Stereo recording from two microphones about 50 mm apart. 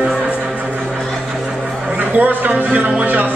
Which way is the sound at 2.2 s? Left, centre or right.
Right.